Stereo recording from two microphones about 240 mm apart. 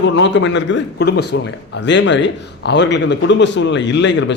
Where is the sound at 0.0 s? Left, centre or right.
Left.